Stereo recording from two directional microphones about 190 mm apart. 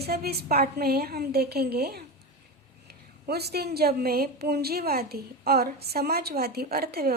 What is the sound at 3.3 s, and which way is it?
A woman's voice, 55° right (ahead or behind).